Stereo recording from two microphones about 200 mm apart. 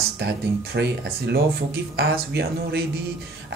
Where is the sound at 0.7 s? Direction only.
55° right (ahead or behind).